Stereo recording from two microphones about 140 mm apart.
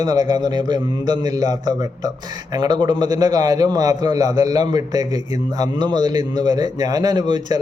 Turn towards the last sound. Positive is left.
turn(degrees=-30)  # may be behind; listen again after turning